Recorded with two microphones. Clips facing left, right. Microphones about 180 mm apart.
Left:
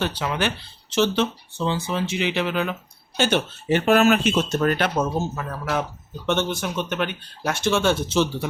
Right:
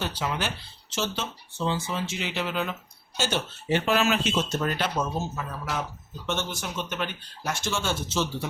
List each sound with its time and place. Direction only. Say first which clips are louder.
0.0 s speech: left 5 dB; 65° left (ahead or behind)